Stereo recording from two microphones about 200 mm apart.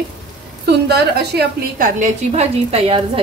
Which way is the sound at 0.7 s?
55° right (ahead or behind).